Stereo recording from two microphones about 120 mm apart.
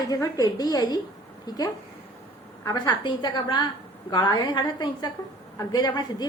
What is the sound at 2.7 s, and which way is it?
A woman's voice, 35° left (ahead or behind).